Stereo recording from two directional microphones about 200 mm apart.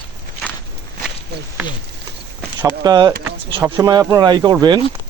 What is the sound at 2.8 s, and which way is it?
Speech, 20° right (ahead or behind).